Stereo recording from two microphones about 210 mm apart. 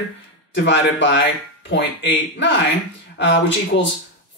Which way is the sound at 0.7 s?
60° left (ahead or behind).